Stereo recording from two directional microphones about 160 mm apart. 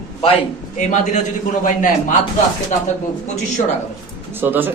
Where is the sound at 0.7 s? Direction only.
50° left (ahead or behind).